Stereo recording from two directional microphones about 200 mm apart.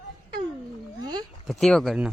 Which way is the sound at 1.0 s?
20° right (ahead or behind).